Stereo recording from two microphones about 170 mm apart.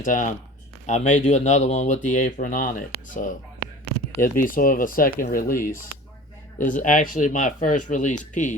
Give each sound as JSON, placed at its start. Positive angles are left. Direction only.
{"t": 0.0, "sound": "speech", "side_deg": 50}
{"t": 6.6, "sound": "speech", "side_deg": 50}